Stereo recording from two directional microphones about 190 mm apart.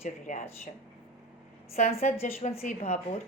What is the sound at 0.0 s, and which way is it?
Speech, 45° left (ahead or behind).